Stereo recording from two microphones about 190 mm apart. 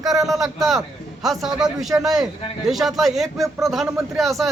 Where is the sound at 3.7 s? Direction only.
Centre (ahead or behind).